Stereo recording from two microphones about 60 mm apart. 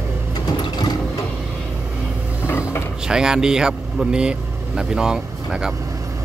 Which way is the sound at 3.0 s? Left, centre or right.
Centre.